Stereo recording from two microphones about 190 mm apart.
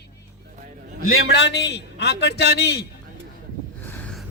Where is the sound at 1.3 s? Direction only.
65° left (ahead or behind).